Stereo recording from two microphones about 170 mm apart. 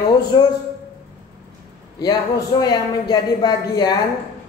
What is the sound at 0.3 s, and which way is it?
Speech, 25° left (ahead or behind).